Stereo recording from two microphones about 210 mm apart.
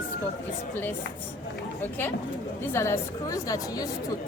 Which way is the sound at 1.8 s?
10° left (ahead or behind).